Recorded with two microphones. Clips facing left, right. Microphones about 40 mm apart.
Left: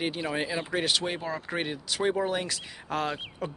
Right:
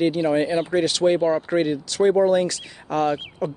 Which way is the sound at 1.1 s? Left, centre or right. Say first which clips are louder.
Right 13 dB; centre.